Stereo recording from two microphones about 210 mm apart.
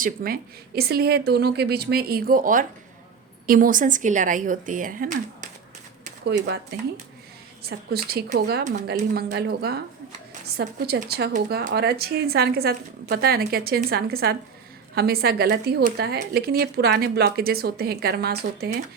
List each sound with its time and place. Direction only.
0.0 s speech: 45° right (ahead or behind)
7.6 s speech: 50° right (ahead or behind)